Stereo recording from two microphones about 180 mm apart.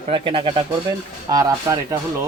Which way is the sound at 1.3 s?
20° right (ahead or behind).